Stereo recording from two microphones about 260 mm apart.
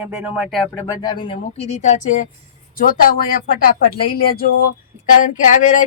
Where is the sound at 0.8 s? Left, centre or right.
Centre; by 3.7 s left.